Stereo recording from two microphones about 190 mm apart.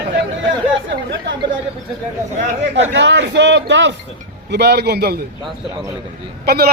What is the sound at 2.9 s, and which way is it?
A man's voice, 70° right (ahead or behind).